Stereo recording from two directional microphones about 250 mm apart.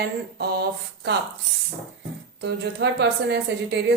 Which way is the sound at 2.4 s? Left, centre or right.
Right.